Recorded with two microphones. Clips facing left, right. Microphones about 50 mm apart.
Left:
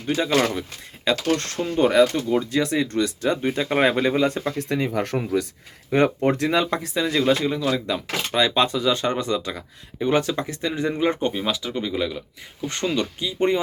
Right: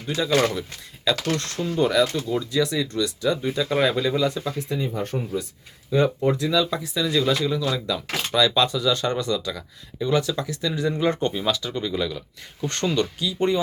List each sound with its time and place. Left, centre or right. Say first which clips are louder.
0.3 s speech: right 1 dB; centre
1.1 s speech: left 2 dB; left
5.9 s speech: left 1 dB; left
6.9 s speech: left 2 dB; left; by 13.1 s centre
13.1 s speech: left 1 dB; left